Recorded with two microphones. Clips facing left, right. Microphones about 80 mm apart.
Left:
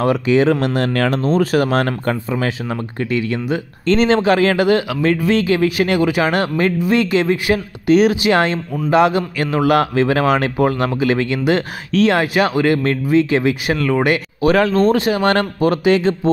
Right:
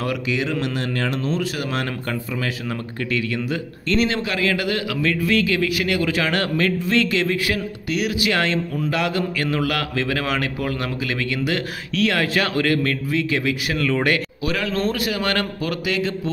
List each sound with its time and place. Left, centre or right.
0.0 s speech: left
1.2 s a man's voice: left
3.1 s a man's voice: left
3.8 s a man's voice: left